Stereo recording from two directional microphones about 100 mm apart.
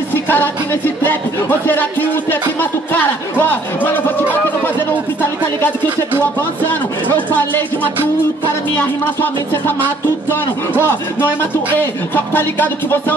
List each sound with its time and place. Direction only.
0.1 s music: 20° left (ahead or behind)
7.2 s speech: 15° left (ahead or behind)
9.2 s music: 20° left (ahead or behind)
12.3 s music: 20° left (ahead or behind)